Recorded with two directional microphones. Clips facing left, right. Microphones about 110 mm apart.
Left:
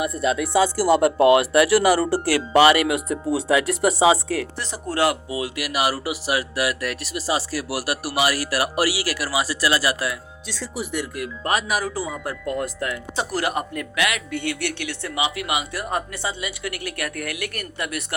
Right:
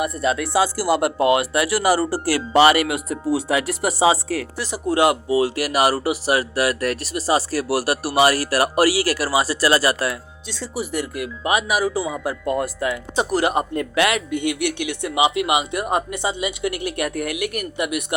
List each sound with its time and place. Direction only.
0.0 s speech: centre (ahead or behind)
1.3 s speech: 25° right (ahead or behind)
3.1 s speech: centre (ahead or behind)
4.9 s speech: 30° right (ahead or behind)
10.6 s speech: centre (ahead or behind)
13.1 s speech: 20° right (ahead or behind)
14.3 s speech: 15° right (ahead or behind)